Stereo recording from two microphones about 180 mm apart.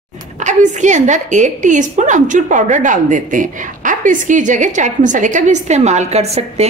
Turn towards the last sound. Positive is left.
turn(degrees=-35)  # may be behind; listen again after turning